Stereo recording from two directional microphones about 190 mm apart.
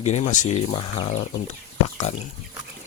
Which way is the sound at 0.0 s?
40° left (ahead or behind).